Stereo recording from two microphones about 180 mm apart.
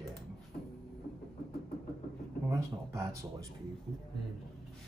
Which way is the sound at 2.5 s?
15° right (ahead or behind).